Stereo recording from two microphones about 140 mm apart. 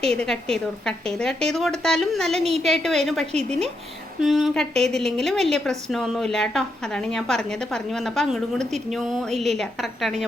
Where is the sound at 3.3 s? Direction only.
50° right (ahead or behind).